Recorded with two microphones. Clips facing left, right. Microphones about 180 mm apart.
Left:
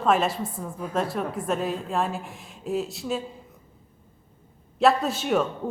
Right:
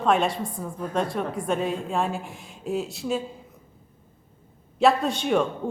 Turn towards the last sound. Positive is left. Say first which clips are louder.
# right 1 dB
turn(degrees=5)  # may be behind; listen again after turning